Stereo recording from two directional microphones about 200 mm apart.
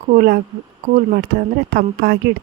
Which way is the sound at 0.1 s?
45° right (ahead or behind).